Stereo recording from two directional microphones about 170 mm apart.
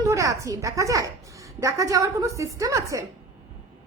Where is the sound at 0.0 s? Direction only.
20° right (ahead or behind).